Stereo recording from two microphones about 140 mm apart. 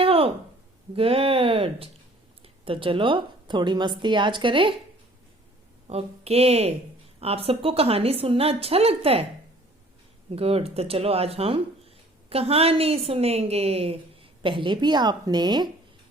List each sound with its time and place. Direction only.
0.0 s a sound: 45° right (ahead or behind)
0.9 s a woman's voice: 40° right (ahead or behind)
5.9 s a woman's voice: 45° right (ahead or behind)
10.3 s a woman's voice: 45° right (ahead or behind)